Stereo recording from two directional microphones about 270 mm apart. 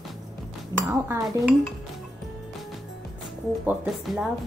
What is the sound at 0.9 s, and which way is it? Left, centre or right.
Speech, centre.